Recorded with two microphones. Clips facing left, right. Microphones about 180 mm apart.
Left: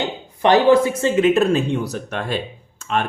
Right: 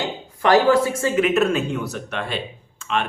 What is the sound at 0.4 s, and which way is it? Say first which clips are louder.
Speech: left 2 dB; 25° left (ahead or behind).